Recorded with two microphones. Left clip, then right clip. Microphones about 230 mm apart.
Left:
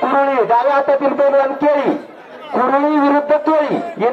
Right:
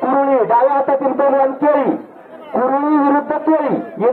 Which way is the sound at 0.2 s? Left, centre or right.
Left.